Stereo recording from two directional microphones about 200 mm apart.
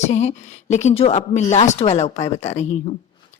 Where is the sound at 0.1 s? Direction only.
35° left (ahead or behind).